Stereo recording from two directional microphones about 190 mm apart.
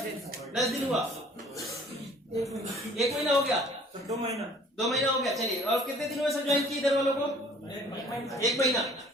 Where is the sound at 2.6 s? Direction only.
Centre (ahead or behind).